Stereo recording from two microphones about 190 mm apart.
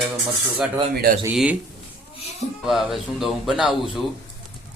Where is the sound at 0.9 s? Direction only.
50° right (ahead or behind).